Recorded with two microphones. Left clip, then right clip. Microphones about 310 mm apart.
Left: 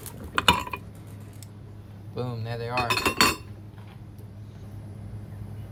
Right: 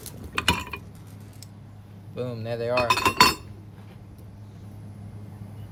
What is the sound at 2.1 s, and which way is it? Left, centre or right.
Speech, centre.